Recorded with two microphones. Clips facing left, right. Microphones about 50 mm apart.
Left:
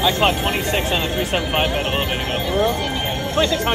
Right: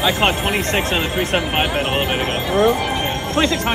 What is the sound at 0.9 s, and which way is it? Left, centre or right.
Speech, centre.